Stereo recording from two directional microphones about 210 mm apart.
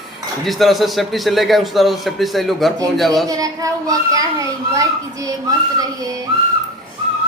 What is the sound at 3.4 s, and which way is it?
A child's voice, 15° right (ahead or behind).